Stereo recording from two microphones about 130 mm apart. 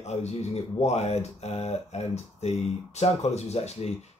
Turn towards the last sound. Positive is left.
turn(degrees=55)  # may be behind; listen again after turning